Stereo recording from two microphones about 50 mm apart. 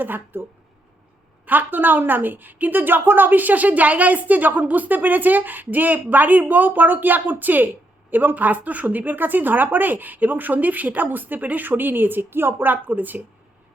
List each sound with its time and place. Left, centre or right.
0.0 s a woman's voice: right
1.5 s a woman's voice: right